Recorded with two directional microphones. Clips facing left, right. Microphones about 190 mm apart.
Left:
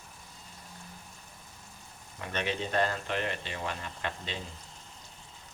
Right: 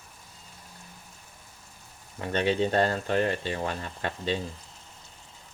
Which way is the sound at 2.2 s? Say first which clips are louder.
Right 8 dB; 30° right (ahead or behind).